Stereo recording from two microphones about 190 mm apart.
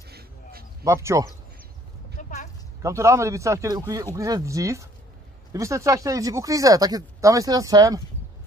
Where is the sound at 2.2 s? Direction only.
40° left (ahead or behind).